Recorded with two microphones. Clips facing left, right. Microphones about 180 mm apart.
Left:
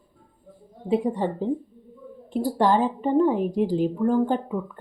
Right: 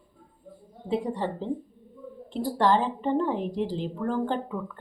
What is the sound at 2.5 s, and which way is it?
A woman's voice, 15° left (ahead or behind).